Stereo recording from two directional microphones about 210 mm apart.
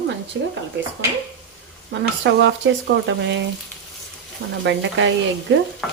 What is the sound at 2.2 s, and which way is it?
Speech, 60° right (ahead or behind).